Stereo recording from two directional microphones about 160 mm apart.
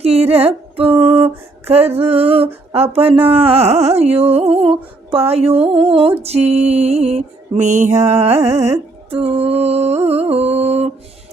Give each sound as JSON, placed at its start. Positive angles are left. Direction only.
{"t": 0.0, "sound": "speech", "side_deg": -40}
{"t": 8.4, "sound": "carnatic music", "side_deg": -15}
{"t": 9.0, "sound": "speech", "side_deg": -40}